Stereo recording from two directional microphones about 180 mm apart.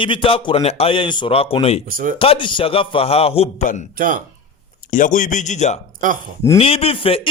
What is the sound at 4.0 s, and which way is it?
Speech, 50° right (ahead or behind).